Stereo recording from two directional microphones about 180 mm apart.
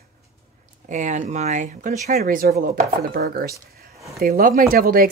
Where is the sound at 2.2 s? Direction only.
55° right (ahead or behind).